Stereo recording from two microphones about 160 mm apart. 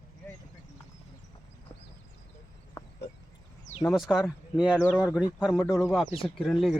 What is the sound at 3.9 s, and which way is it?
Speech, 5° right (ahead or behind).